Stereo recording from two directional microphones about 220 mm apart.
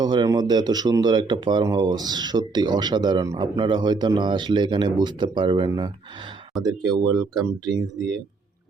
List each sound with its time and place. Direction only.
0.0 s speech: 20° right (ahead or behind)